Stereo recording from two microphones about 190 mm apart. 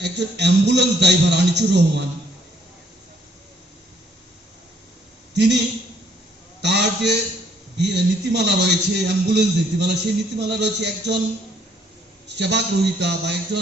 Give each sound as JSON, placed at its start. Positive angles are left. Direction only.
{"t": 0.0, "sound": "a man's voice", "side_deg": -65}
{"t": 5.3, "sound": "a woman's voice", "side_deg": -65}
{"t": 6.6, "sound": "a man's voice", "side_deg": -65}
{"t": 12.4, "sound": "a man's voice", "side_deg": -65}